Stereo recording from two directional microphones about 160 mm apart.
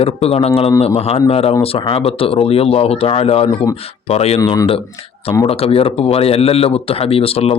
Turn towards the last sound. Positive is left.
turn(degrees=40)  # may be behind; listen again after turning